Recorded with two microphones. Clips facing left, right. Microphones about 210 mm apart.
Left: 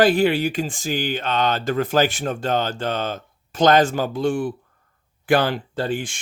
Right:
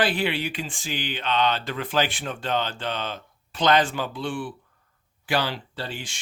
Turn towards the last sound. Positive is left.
turn(degrees=50)  # may be behind; listen again after turning